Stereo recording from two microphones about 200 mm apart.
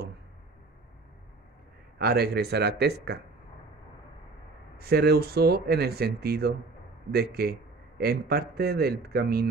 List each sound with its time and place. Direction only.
2.0 s speech: 55° right (ahead or behind)
4.7 s speech: 55° right (ahead or behind)